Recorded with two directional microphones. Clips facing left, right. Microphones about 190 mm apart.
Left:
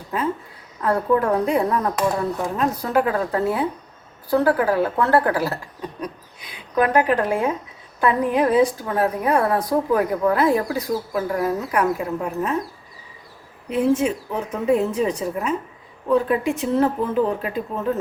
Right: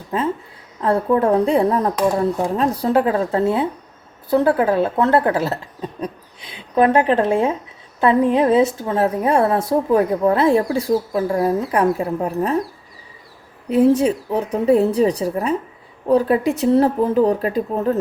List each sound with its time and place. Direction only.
0.8 s a woman's voice: 25° right (ahead or behind)
13.7 s speech: 35° right (ahead or behind)